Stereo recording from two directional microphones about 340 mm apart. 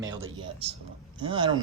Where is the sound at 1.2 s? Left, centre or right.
Centre.